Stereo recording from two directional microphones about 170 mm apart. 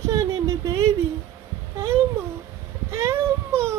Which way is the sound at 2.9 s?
15° right (ahead or behind).